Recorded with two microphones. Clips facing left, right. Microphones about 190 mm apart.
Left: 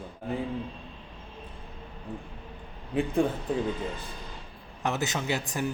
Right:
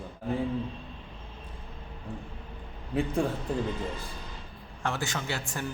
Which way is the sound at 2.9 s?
Centre (ahead or behind).